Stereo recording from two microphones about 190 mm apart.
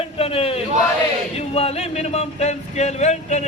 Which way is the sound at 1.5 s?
30° left (ahead or behind).